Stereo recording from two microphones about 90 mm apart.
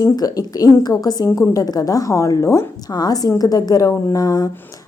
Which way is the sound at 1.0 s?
45° left (ahead or behind).